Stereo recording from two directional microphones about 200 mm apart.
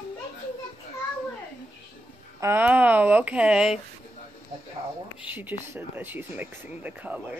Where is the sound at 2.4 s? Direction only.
10° right (ahead or behind).